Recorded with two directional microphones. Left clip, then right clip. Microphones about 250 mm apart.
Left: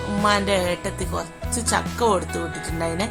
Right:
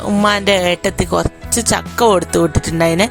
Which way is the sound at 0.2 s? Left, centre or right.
Right.